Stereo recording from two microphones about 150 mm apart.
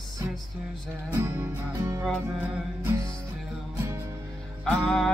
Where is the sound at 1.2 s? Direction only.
15° right (ahead or behind).